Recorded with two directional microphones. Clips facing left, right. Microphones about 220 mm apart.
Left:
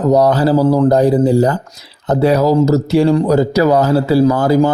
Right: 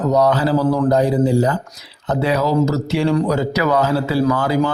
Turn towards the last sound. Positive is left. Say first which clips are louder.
# left 6 dB
turn(degrees=40)  # may be behind; listen again after turning